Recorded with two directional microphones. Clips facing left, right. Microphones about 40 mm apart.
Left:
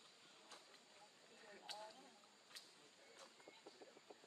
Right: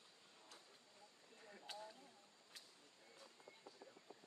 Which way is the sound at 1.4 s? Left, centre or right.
Centre.